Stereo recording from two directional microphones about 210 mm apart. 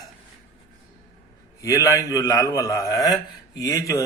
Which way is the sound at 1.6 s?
15° left (ahead or behind).